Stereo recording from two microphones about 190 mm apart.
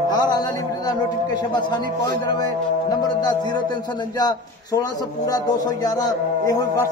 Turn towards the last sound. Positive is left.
turn(degrees=20)  # may be behind; listen again after turning